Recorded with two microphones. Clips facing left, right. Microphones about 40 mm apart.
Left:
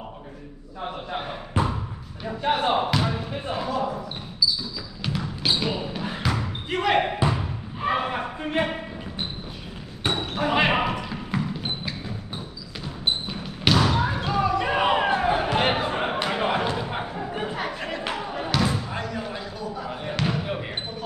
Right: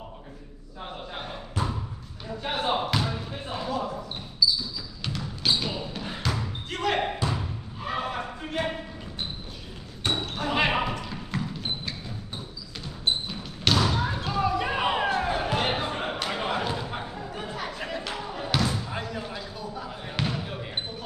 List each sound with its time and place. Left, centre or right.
1.1 s basketball bounce: left
2.4 s speech: centre
3.0 s a sound: left
5.0 s basketball bounce: centre
10.0 s basketball bounce: left
13.8 s basketball bounce: left
14.2 s basketball bounce: centre
14.7 s a sound: centre
16.7 s thump: left
18.1 s basketball bounce: left
19.1 s basketball bounce: centre
20.2 s basketball bounce: left